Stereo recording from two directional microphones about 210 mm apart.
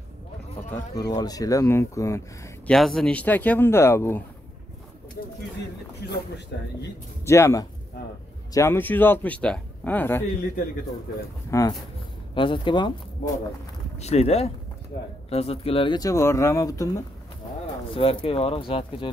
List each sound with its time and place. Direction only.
0.7 s speech: 15° left (ahead or behind)
6.0 s speech: 55° left (ahead or behind)
7.2 s speech: 15° left (ahead or behind)
11.5 s speech: 15° left (ahead or behind)
13.9 s speech: 30° left (ahead or behind); by 17.0 s 15° left (ahead or behind)
17.9 s speech: 25° left (ahead or behind)